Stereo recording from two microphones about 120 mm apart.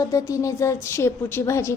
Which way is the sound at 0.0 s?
25° left (ahead or behind).